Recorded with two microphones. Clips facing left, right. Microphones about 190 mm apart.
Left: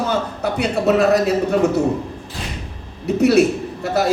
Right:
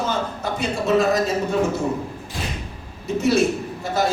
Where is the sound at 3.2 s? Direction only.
65° left (ahead or behind).